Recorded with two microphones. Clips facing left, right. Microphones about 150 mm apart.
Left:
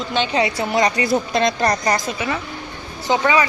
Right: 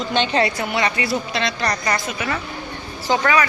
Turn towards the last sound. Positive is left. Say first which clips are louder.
# left 1 dB
turn(degrees=20)  # may be behind; listen again after turning